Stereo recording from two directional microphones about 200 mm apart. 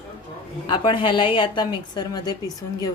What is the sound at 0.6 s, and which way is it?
A woman's voice, 25° left (ahead or behind).